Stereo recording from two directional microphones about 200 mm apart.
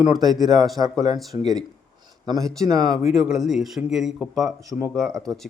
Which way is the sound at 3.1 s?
Centre (ahead or behind).